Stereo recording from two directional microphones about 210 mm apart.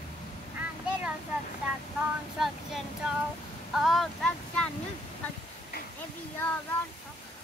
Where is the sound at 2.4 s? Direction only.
Centre (ahead or behind).